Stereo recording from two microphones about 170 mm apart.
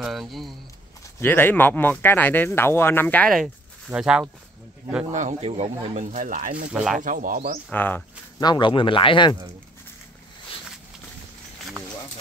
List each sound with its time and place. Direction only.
0.0 s speech: centre (ahead or behind)
1.2 s speech: 10° left (ahead or behind); by 4.3 s 5° right (ahead or behind)
5.1 s speech: 40° right (ahead or behind)
6.7 s speech: 5° right (ahead or behind)
7.0 s speech: 50° right (ahead or behind)
7.7 s speech: 10° left (ahead or behind)
8.4 s speech: 25° left (ahead or behind)